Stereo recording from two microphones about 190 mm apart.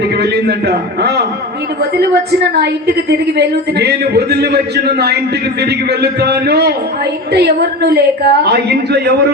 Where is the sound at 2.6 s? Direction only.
60° right (ahead or behind).